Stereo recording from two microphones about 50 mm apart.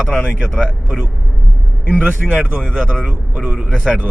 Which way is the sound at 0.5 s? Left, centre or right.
Centre.